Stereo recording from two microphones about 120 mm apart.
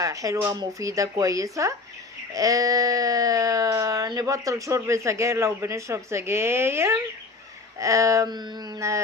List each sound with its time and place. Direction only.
0.0 s speech: 25° right (ahead or behind)